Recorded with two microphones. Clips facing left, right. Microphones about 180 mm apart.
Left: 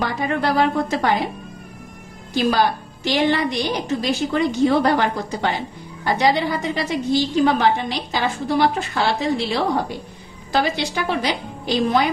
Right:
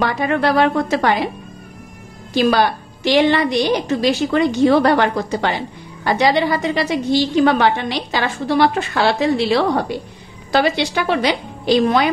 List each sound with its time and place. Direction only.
0.0 s a woman's voice: 75° right (ahead or behind)
2.3 s a woman's voice: 75° right (ahead or behind)